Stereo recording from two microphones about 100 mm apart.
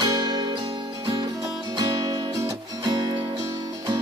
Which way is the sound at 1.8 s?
40° right (ahead or behind).